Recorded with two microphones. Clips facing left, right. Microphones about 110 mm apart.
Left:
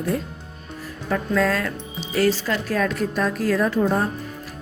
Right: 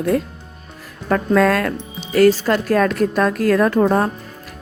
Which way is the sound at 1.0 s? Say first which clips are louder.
Right 6 dB; 60° right (ahead or behind).